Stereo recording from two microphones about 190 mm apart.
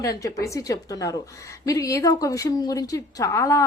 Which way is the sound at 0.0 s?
15° left (ahead or behind).